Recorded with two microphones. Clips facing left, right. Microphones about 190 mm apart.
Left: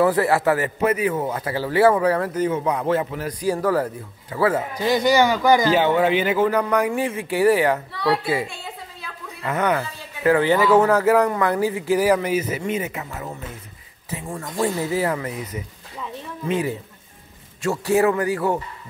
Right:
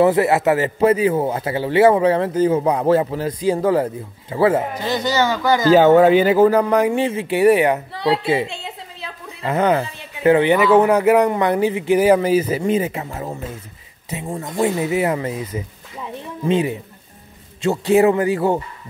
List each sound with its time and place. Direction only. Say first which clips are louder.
0.0 s speech: right 3 dB; 20° right (ahead or behind)
4.8 s speech: left 6 dB; 10° left (ahead or behind)
5.7 s speech: right 7 dB; 40° right (ahead or behind); by 18.6 s 25° right (ahead or behind)